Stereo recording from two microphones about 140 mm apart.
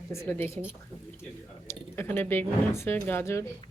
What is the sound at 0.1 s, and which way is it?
Speech, 20° left (ahead or behind).